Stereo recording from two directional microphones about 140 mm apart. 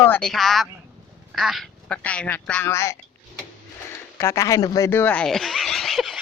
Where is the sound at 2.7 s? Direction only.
20° left (ahead or behind).